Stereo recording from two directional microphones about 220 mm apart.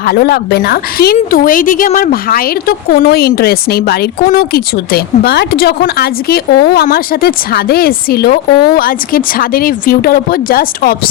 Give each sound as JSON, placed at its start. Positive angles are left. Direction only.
{"t": 0.0, "sound": "a woman's voice", "side_deg": 45}